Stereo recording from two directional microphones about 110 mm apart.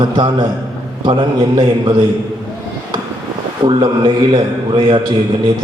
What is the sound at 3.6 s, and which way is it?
A man's voice, 50° right (ahead or behind).